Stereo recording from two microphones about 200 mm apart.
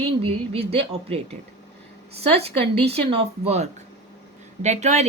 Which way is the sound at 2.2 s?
30° right (ahead or behind).